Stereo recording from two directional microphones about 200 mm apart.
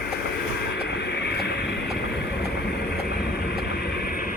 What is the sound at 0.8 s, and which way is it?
Vehicle, 55° left (ahead or behind).